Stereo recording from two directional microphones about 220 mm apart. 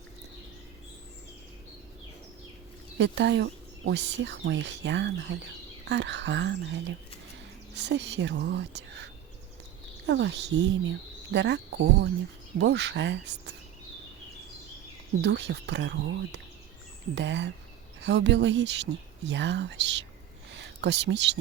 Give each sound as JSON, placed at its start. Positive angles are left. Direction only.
{"t": 3.0, "sound": "speech", "side_deg": -55}
{"t": 7.8, "sound": "speech", "side_deg": -50}
{"t": 10.1, "sound": "speech", "side_deg": -50}
{"t": 15.2, "sound": "speech", "side_deg": -50}